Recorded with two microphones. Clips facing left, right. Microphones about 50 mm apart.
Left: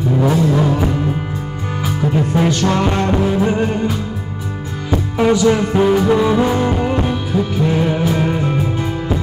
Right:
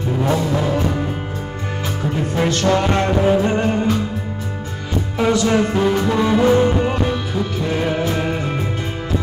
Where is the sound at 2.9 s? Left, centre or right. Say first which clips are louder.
Right 1 dB; right.